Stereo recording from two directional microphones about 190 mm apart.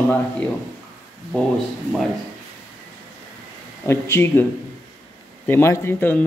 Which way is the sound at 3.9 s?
15° left (ahead or behind).